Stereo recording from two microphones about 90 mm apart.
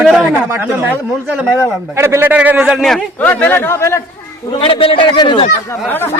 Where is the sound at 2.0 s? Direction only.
25° right (ahead or behind).